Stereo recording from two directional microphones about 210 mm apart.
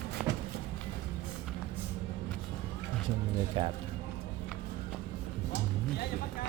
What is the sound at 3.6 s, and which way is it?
Speech, 25° right (ahead or behind).